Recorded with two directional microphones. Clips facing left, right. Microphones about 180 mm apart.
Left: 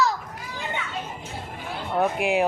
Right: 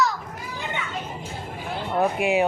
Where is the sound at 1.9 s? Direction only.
Centre (ahead or behind).